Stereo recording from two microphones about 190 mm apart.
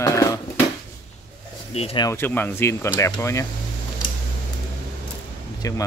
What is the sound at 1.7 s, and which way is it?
Speech, 30° left (ahead or behind).